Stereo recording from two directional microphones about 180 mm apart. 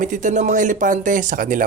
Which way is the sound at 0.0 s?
45° right (ahead or behind).